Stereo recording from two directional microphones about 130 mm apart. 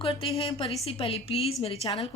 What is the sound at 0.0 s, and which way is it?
Speech, 45° left (ahead or behind).